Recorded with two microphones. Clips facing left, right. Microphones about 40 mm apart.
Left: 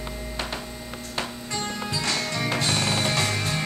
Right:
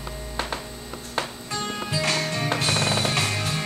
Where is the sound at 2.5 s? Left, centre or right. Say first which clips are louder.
Right 1 dB; right.